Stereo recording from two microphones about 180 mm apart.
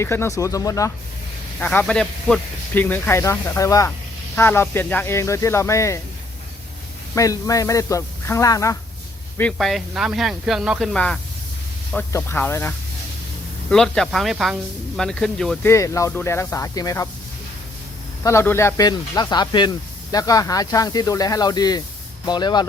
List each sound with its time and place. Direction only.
0.0 s speech: 15° left (ahead or behind)
1.5 s speech: 10° left (ahead or behind)
7.2 s speech: 20° left (ahead or behind)
9.4 s speech: 5° left (ahead or behind)
15.7 s speech: 15° left (ahead or behind)
18.2 s speech: 15° left (ahead or behind)